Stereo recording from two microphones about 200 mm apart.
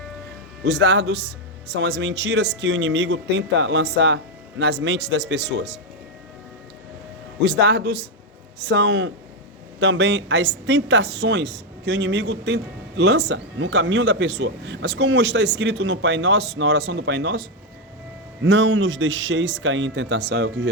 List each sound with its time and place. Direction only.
0.6 s speech: 60° right (ahead or behind)
7.4 s speech: 55° right (ahead or behind)
18.4 s speech: 70° right (ahead or behind)